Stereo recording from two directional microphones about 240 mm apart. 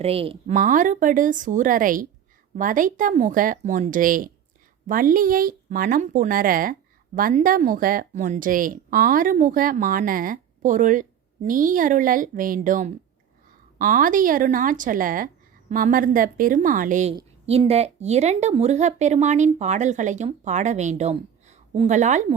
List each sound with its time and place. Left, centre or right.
0.0 s a woman's voice: right